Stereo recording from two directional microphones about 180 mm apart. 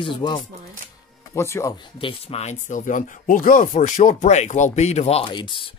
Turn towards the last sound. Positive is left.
turn(degrees=25)  # may be behind; listen again after turning